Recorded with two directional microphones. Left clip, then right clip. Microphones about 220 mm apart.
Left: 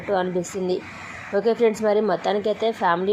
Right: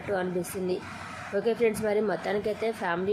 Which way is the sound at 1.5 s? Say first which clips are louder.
Left 6 dB; 15° left (ahead or behind).